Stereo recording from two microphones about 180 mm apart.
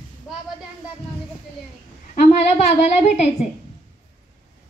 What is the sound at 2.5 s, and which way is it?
Speech, 40° left (ahead or behind).